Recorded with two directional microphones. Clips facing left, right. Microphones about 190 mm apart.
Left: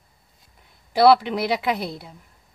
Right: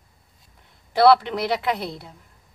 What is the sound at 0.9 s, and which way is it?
A woman's voice, 10° left (ahead or behind).